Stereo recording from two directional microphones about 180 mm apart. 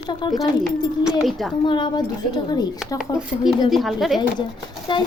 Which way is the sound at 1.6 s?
25° left (ahead or behind).